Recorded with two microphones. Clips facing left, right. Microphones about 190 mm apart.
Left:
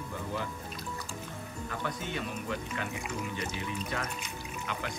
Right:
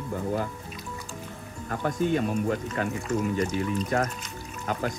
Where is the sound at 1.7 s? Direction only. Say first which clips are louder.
Right 12 dB; 45° right (ahead or behind).